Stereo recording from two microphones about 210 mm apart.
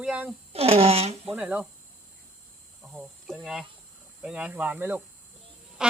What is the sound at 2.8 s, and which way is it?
Speech, centre (ahead or behind).